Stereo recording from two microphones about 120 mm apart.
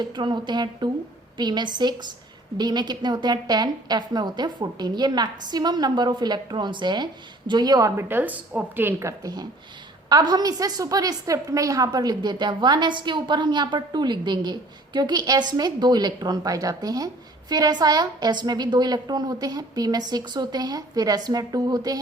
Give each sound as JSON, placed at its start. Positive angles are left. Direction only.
{"t": 0.0, "sound": "a woman's voice", "side_deg": -40}
{"t": 8.0, "sound": "a woman's voice", "side_deg": -15}